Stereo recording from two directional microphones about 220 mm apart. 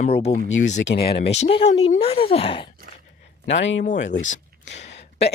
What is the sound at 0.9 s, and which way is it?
Speech, 45° left (ahead or behind).